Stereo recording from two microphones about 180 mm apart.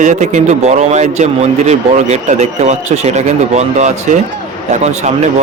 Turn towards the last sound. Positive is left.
turn(degrees=-40)  # may be behind; listen again after turning